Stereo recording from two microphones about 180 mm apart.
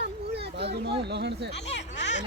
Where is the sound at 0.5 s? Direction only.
70° right (ahead or behind).